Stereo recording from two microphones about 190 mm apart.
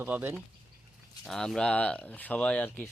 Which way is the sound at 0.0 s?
10° right (ahead or behind).